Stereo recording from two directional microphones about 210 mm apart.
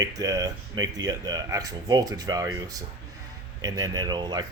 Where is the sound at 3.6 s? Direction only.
15° right (ahead or behind).